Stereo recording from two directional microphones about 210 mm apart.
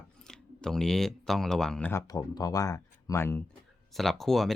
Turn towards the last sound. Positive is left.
turn(degrees=0)  # may be behind; listen again after turning